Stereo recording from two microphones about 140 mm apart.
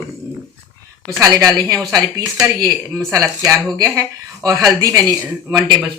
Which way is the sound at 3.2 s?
5° right (ahead or behind).